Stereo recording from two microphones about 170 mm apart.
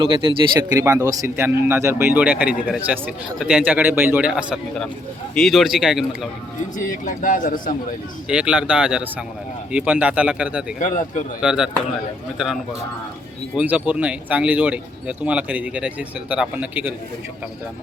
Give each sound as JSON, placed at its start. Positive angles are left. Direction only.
{"t": 0.0, "sound": "speech", "side_deg": -30}
{"t": 0.8, "sound": "a man's voice", "side_deg": -15}
{"t": 6.7, "sound": "a man's voice", "side_deg": 50}
{"t": 8.3, "sound": "a man's voice", "side_deg": -5}
{"t": 10.8, "sound": "a man's voice", "side_deg": 50}
{"t": 11.3, "sound": "a man's voice", "side_deg": -5}
{"t": 13.6, "sound": "speech", "side_deg": -5}